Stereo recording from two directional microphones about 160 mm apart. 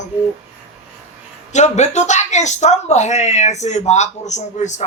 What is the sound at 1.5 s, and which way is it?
Speech, 45° left (ahead or behind).